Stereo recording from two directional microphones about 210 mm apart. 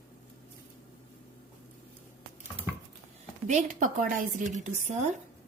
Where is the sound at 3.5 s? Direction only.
35° right (ahead or behind).